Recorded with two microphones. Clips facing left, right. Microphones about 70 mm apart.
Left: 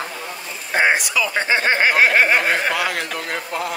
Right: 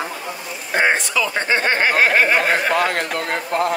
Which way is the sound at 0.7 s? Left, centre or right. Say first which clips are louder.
Even; centre.